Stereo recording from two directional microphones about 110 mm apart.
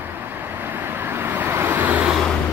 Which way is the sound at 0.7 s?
20° right (ahead or behind).